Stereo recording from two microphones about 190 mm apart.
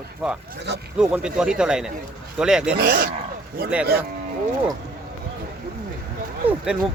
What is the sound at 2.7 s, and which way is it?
Speech, 50° right (ahead or behind).